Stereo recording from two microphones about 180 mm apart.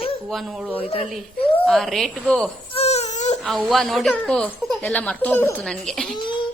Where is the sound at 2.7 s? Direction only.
35° left (ahead or behind).